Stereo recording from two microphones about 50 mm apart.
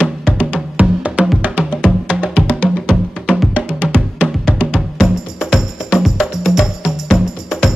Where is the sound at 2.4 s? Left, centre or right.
Centre.